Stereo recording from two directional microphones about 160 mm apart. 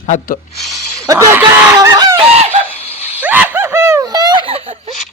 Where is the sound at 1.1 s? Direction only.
15° right (ahead or behind).